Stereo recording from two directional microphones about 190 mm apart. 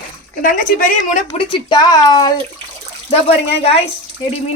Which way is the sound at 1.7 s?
20° left (ahead or behind).